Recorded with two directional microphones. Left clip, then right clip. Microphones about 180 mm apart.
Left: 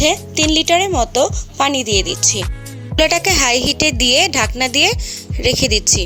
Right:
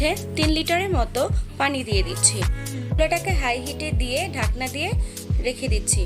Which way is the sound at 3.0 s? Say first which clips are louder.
Left 9 dB; 55° left (ahead or behind).